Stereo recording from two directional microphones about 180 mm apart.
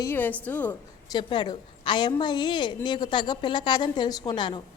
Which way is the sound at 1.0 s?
25° left (ahead or behind).